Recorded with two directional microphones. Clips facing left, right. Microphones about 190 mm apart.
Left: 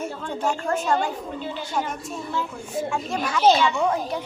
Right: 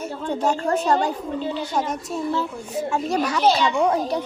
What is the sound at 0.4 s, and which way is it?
A woman's voice, 35° right (ahead or behind).